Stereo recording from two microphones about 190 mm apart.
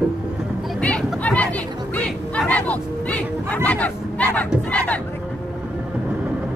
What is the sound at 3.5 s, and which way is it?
Speech, 5° left (ahead or behind).